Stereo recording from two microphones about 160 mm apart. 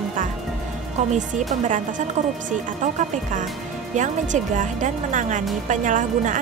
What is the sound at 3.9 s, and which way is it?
Speech, 50° right (ahead or behind).